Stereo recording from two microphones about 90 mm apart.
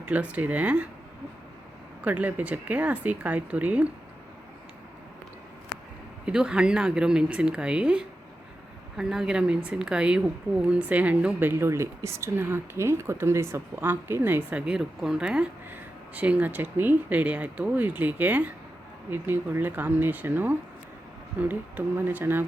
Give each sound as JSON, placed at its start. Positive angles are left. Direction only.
{"t": 0.0, "sound": "a woman's voice", "side_deg": -15}
{"t": 2.0, "sound": "a woman's voice", "side_deg": -15}
{"t": 6.2, "sound": "a woman's voice", "side_deg": -10}
{"t": 11.5, "sound": "a woman's voice", "side_deg": -30}
{"t": 15.7, "sound": "a woman's voice", "side_deg": -20}